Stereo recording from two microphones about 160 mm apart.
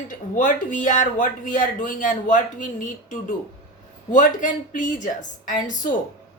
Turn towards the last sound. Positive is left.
turn(degrees=55)  # may be behind; listen again after turning